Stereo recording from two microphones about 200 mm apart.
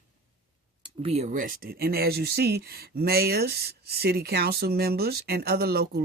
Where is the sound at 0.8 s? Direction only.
30° right (ahead or behind).